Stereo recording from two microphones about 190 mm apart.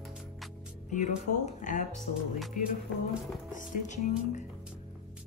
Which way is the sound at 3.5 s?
40° left (ahead or behind).